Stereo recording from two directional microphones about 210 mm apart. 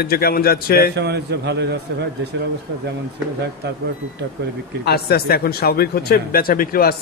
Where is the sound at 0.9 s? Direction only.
50° right (ahead or behind).